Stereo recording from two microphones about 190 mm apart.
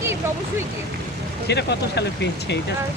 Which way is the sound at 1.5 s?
60° left (ahead or behind).